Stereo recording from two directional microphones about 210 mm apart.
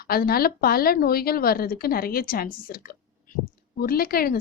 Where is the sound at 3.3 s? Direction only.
40° left (ahead or behind).